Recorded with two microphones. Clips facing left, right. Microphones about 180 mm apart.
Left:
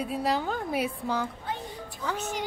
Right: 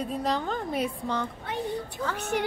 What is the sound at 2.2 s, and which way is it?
Speech, 60° right (ahead or behind).